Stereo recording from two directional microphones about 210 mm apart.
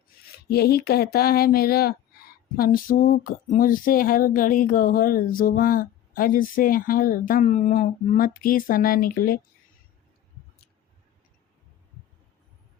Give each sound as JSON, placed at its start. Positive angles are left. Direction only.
{"t": 0.4, "sound": "speech", "side_deg": 50}